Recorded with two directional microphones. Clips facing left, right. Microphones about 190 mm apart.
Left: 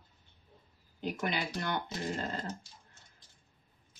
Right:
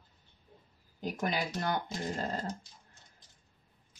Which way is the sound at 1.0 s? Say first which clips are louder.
Right 1 dB; 40° right (ahead or behind).